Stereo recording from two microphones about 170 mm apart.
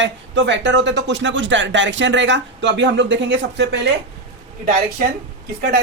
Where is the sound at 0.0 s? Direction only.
90° right.